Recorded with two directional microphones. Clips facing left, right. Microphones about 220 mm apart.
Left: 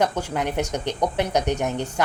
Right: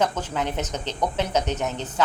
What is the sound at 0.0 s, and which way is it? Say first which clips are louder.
A woman's voice: left 2 dB; 15° left (ahead or behind).